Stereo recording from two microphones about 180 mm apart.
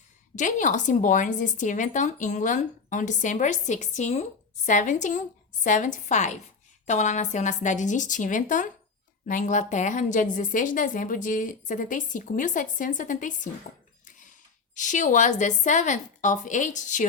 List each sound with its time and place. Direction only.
0.3 s speech: 45° left (ahead or behind)
14.8 s speech: 45° left (ahead or behind)